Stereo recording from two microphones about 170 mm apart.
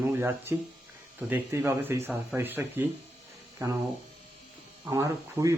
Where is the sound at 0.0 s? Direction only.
15° right (ahead or behind).